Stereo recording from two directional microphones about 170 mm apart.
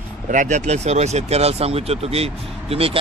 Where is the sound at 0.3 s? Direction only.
45° right (ahead or behind).